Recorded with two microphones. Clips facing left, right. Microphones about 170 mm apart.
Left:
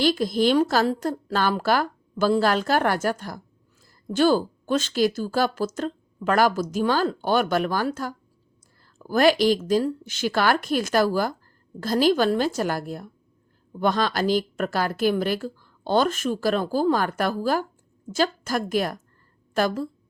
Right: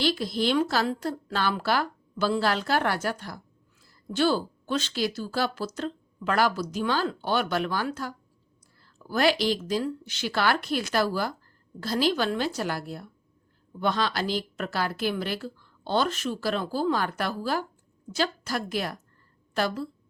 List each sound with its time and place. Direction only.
0.0 s a woman's voice: 45° left (ahead or behind)